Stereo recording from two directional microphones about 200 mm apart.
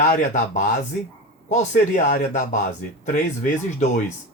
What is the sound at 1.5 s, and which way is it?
Speech, 35° left (ahead or behind).